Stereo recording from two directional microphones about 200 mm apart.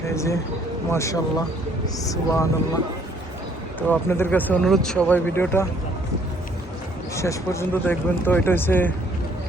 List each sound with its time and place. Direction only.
0.1 s speech: 15° left (ahead or behind)
3.8 s speech: 10° left (ahead or behind)
7.2 s speech: 15° left (ahead or behind)